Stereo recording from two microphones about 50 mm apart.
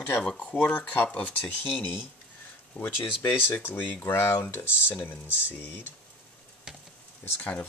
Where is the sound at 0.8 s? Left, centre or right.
Left.